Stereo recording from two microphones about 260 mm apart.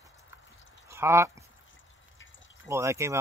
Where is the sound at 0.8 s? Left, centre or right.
Centre.